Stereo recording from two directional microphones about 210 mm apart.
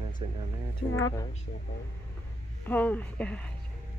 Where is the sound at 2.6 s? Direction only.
10° left (ahead or behind).